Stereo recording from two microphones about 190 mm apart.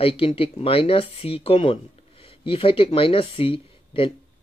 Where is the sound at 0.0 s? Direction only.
30° left (ahead or behind).